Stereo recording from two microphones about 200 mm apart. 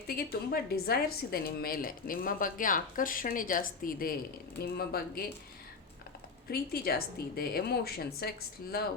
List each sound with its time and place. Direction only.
0.1 s a woman's voice: 50° left (ahead or behind)
6.5 s a woman's voice: 50° left (ahead or behind)